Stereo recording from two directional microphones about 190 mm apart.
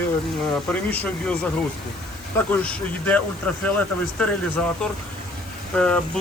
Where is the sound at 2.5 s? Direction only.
10° left (ahead or behind).